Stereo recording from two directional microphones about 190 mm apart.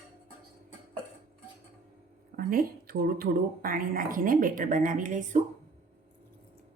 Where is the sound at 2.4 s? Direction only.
50° right (ahead or behind).